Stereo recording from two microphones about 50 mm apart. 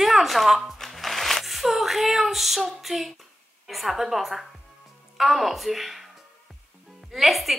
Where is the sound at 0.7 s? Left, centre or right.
Centre.